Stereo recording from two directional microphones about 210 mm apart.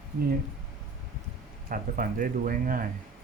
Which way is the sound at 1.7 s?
40° right (ahead or behind).